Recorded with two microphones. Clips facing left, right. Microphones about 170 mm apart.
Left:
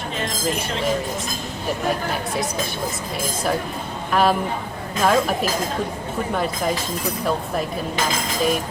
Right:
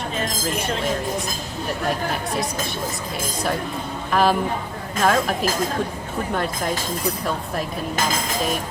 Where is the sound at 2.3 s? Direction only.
Centre (ahead or behind).